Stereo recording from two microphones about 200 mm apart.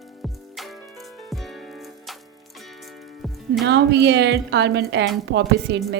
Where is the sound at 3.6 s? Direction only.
60° right (ahead or behind).